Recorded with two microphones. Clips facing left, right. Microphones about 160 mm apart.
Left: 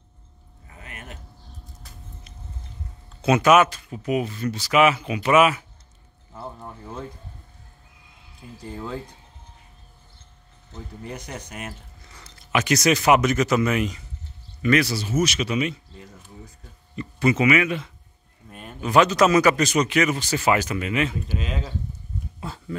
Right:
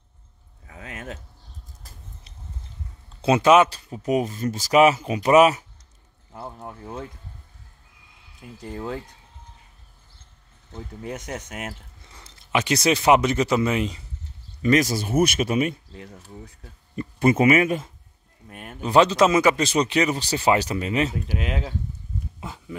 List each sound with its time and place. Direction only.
0.7 s a sound: 90° right
3.2 s speech: 30° right (ahead or behind)
12.1 s speech: 25° right (ahead or behind)
14.6 s speech: 40° right (ahead or behind)
16.9 s speech: 50° right (ahead or behind)
18.8 s speech: 30° right (ahead or behind)
22.4 s speech: 15° right (ahead or behind)